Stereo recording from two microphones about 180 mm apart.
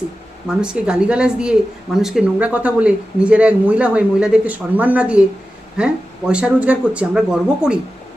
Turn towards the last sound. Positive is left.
turn(degrees=-5)  # may be behind; listen again after turning